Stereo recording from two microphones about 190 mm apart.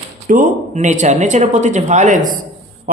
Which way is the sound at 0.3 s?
45° right (ahead or behind).